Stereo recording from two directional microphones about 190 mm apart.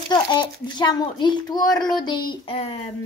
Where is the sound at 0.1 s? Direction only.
25° left (ahead or behind).